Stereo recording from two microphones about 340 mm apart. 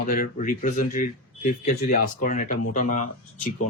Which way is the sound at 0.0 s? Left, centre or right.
Left.